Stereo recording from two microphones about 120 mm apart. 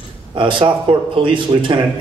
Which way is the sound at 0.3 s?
45° right (ahead or behind).